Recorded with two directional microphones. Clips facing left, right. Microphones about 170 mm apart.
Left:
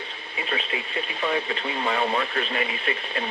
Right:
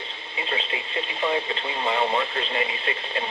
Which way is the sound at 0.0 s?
25° right (ahead or behind).